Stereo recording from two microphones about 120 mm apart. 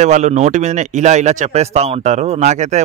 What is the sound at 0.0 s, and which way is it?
Speech, 80° right.